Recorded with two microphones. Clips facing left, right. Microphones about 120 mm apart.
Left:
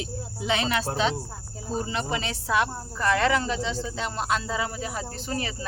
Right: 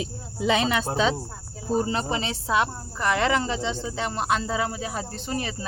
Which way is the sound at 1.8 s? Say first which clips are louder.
Right 3 dB; 35° right (ahead or behind).